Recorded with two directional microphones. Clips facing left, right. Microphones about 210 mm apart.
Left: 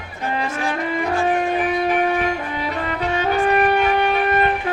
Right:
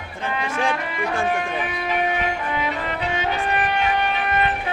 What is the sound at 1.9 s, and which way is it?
Music, 45° left (ahead or behind).